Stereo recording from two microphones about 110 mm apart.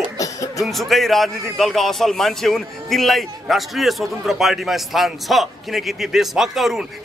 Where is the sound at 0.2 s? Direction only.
30° left (ahead or behind).